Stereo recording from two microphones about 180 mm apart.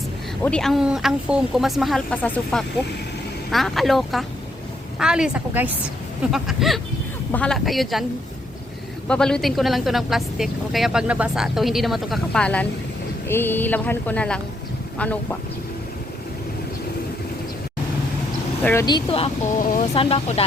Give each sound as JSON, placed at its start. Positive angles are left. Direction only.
{"t": 0.4, "sound": "speech", "side_deg": 5}
{"t": 9.0, "sound": "speech", "side_deg": 5}
{"t": 18.6, "sound": "speech", "side_deg": 15}
{"t": 18.9, "sound": "speech", "side_deg": 30}